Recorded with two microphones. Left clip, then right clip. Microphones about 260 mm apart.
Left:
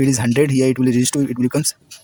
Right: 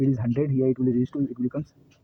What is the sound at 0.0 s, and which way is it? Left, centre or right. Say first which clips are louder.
Speech: left 9 dB; left.